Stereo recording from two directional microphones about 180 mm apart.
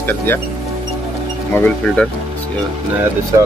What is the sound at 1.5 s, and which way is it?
Speech, 10° left (ahead or behind).